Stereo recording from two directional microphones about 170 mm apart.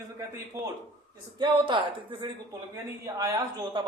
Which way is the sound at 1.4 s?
30° right (ahead or behind).